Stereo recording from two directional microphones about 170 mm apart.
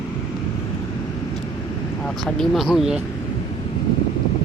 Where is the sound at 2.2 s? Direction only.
Centre (ahead or behind).